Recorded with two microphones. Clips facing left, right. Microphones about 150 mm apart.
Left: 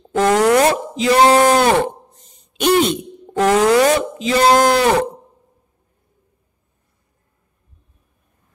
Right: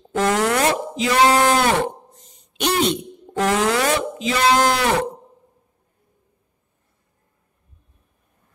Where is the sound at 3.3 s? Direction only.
40° left (ahead or behind).